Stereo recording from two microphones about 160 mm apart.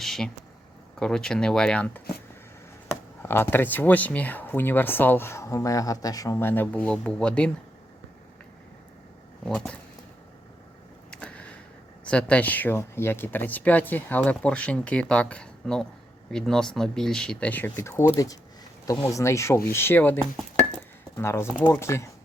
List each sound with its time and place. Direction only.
0.0 s speech: centre (ahead or behind)
3.2 s speech: 15° left (ahead or behind)
9.4 s speech: 5° left (ahead or behind)
11.1 s a sound: 5° left (ahead or behind)
12.0 s speech: 5° left (ahead or behind)